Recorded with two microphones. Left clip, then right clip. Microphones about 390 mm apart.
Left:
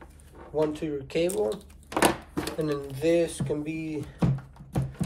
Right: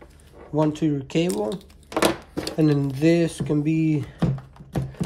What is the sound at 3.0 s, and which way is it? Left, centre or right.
Speech, right.